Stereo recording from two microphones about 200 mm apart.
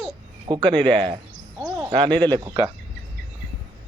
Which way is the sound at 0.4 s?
20° right (ahead or behind).